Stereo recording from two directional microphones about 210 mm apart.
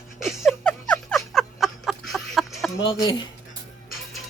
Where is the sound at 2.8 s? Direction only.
25° left (ahead or behind).